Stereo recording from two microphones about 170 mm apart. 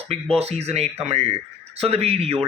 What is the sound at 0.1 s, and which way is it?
Speech, 35° right (ahead or behind).